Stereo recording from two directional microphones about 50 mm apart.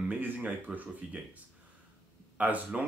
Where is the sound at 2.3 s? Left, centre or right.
Right.